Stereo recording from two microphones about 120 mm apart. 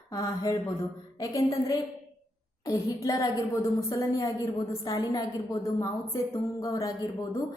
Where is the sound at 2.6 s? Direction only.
25° left (ahead or behind).